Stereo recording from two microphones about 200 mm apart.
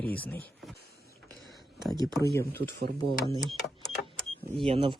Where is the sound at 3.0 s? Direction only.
30° right (ahead or behind).